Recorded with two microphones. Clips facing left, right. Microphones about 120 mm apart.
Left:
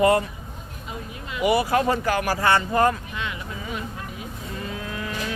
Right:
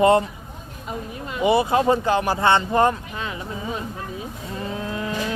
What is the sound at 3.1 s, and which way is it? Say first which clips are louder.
Insect: right 2 dB; 35° right (ahead or behind).